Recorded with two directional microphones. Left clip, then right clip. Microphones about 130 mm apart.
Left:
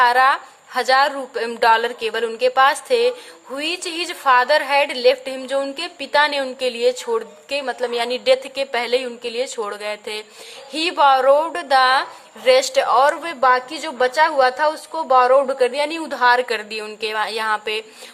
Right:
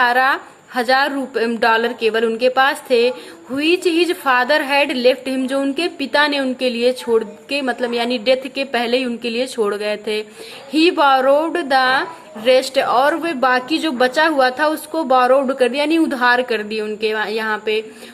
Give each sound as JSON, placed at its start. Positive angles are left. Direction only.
{"t": 0.0, "sound": "a woman's voice", "side_deg": 35}